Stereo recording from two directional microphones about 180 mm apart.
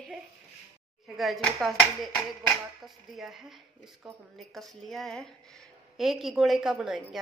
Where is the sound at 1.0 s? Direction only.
Centre (ahead or behind).